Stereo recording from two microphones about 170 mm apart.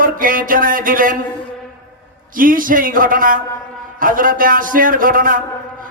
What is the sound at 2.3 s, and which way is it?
A woman's voice, 55° right (ahead or behind).